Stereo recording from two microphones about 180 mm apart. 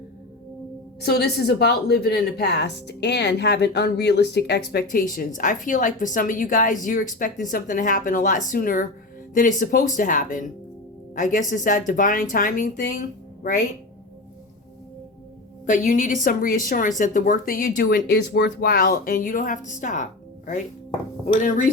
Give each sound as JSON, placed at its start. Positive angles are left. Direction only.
{"t": 1.0, "sound": "speech", "side_deg": 65}
{"t": 15.6, "sound": "speech", "side_deg": 50}
{"t": 21.4, "sound": "speech", "side_deg": 45}